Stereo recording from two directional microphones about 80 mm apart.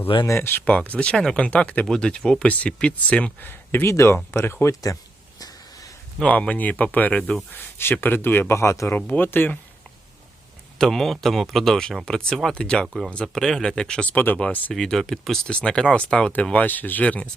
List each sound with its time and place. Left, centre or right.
0.3 s speech: left
0.6 s speech: centre
1.4 s speech: centre; by 4.7 s left
6.2 s speech: centre
7.5 s speech: left
9.0 s speech: left
10.8 s speech: centre
14.7 s speech: centre